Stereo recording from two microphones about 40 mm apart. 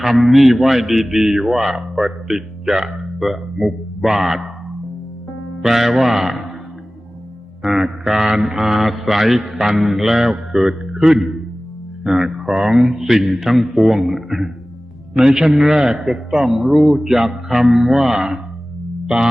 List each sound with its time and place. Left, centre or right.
0.0 s mantra: centre
1.5 s speech: centre
3.2 s mantra: centre
5.6 s mantra: centre
7.6 s speech: centre
8.0 s mantra: centre
9.8 s a man's voice: centre
13.3 s mantra: centre
14.1 s speech: centre
19.0 s music: centre